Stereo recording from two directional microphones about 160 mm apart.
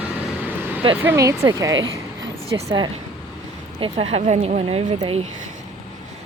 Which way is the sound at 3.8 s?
40° right (ahead or behind).